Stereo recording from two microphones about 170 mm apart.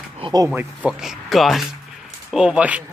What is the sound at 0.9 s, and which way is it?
Speech, 5° right (ahead or behind).